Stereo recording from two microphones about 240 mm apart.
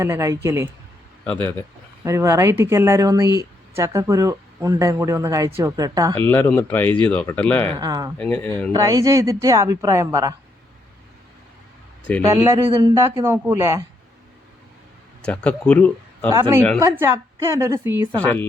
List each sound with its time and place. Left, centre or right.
0.0 s speech: centre
1.2 s speech: centre
2.0 s speech: centre
6.1 s speech: centre
7.8 s speech: centre
8.2 s speech: centre
8.7 s speech: centre
12.2 s speech: centre
15.2 s speech: centre
16.3 s speech: centre